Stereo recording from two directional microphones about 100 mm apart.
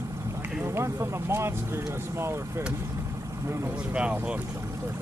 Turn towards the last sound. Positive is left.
turn(degrees=-10)  # may be behind; listen again after turning